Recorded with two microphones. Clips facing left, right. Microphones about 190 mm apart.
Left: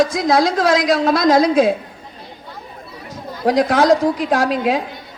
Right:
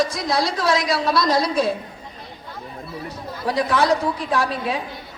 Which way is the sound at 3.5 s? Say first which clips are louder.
Left 6 dB; 90° left.